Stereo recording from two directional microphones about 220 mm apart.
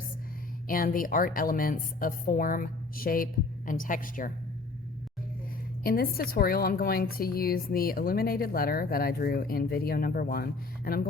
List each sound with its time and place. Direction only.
0.7 s a woman's voice: 40° left (ahead or behind)
5.8 s a woman's voice: 40° left (ahead or behind)